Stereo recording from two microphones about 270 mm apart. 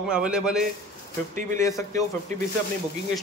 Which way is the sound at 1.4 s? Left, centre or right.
Right.